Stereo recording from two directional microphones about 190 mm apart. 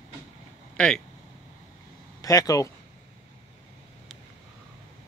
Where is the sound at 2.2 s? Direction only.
20° left (ahead or behind).